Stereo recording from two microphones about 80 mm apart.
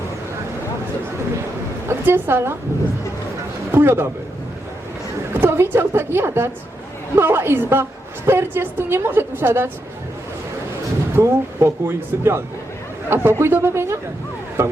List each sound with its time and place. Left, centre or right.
1.9 s a woman's voice: right
3.7 s speech: right
5.3 s a woman's voice: right
11.2 s speech: right
14.6 s a sound: right